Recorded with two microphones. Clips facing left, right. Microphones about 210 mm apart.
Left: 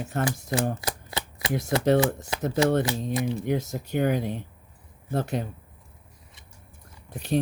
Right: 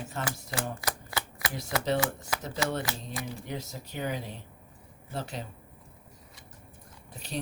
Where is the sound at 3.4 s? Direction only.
55° left (ahead or behind).